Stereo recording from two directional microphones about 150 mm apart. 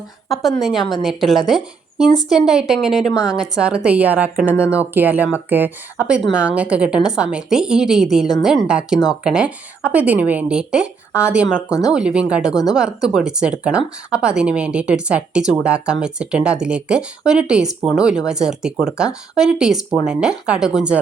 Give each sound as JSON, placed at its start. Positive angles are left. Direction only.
{"t": 0.6, "sound": "a woman's voice", "side_deg": -5}
{"t": 11.7, "sound": "speech", "side_deg": 25}
{"t": 11.9, "sound": "a woman's voice", "side_deg": -5}